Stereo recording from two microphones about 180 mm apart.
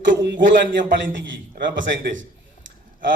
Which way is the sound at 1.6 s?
55° right (ahead or behind).